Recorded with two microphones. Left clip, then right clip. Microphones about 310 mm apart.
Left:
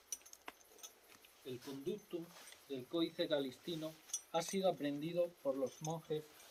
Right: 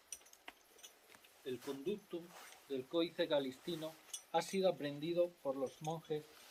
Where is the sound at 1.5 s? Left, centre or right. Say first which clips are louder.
Right 3 dB; centre.